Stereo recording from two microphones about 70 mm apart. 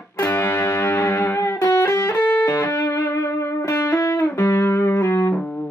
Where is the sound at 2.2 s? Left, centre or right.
Left.